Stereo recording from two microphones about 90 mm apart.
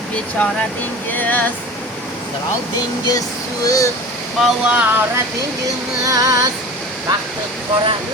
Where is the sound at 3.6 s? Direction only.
40° left (ahead or behind).